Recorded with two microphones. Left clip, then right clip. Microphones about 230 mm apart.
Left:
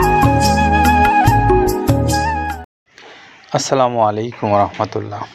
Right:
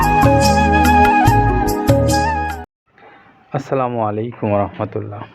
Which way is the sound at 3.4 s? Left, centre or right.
Centre.